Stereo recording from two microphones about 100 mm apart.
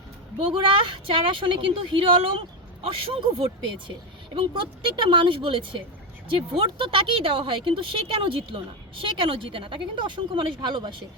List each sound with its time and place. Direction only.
0.3 s a woman's voice: 60° right (ahead or behind)